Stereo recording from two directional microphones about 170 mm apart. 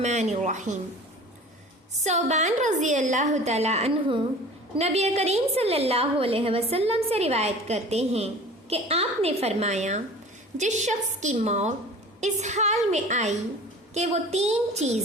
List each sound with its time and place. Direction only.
0.0 s a woman's voice: 45° right (ahead or behind)
2.0 s a woman's voice: 40° right (ahead or behind)